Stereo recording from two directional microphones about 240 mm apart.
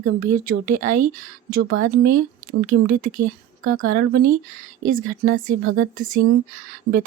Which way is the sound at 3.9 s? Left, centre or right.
Right.